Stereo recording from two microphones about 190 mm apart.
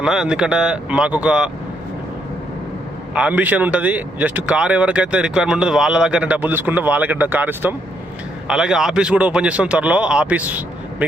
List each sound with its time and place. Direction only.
0.0 s speech: 5° right (ahead or behind)
3.2 s speech: 10° right (ahead or behind)